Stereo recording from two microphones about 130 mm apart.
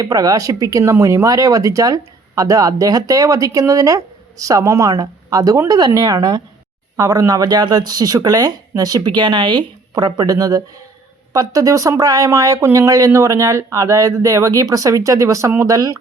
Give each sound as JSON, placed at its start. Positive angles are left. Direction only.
{"t": 0.0, "sound": "speech", "side_deg": -30}